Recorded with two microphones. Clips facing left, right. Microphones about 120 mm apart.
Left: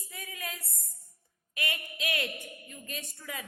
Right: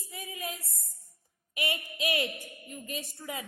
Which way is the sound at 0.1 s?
20° right (ahead or behind).